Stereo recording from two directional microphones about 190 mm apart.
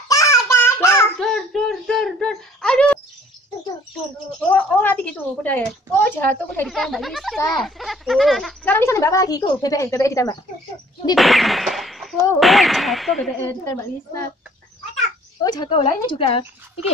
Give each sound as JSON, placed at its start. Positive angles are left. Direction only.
{"t": 0.1, "sound": "child singing", "side_deg": 15}
{"t": 1.2, "sound": "a sound", "side_deg": 0}
{"t": 3.9, "sound": "a child's voice", "side_deg": 5}
{"t": 8.7, "sound": "speech", "side_deg": 15}
{"t": 11.1, "sound": "a sound", "side_deg": 0}
{"t": 12.4, "sound": "speech", "side_deg": 0}
{"t": 13.4, "sound": "speech", "side_deg": 10}
{"t": 15.4, "sound": "a woman's voice", "side_deg": 20}